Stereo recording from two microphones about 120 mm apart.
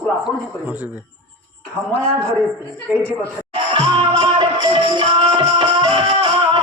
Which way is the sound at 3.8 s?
45° right (ahead or behind).